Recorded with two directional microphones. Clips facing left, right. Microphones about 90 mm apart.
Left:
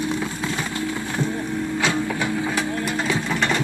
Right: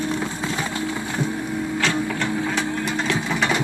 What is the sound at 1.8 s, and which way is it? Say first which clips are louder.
Printer: even; 10° left (ahead or behind).